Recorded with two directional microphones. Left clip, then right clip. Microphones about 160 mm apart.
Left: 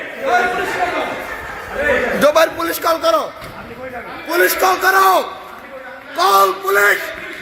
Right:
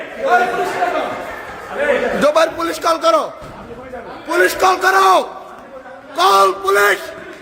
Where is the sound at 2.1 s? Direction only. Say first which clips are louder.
Left 2 dB; 5° right (ahead or behind).